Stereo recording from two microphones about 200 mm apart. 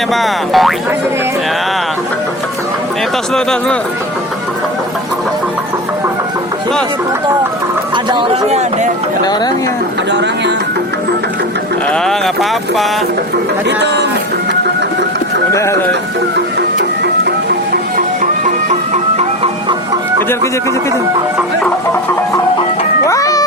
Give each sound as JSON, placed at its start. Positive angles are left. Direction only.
{"t": 0.1, "sound": "music", "side_deg": 0}
{"t": 3.3, "sound": "music", "side_deg": 5}
{"t": 7.9, "sound": "speech", "side_deg": -25}
{"t": 10.1, "sound": "speech", "side_deg": -60}
{"t": 11.9, "sound": "speech", "side_deg": 0}
{"t": 13.7, "sound": "speech", "side_deg": -60}
{"t": 15.5, "sound": "speech", "side_deg": 15}
{"t": 23.0, "sound": "music", "side_deg": 15}